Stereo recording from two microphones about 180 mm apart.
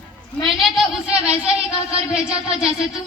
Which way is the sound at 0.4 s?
Centre (ahead or behind).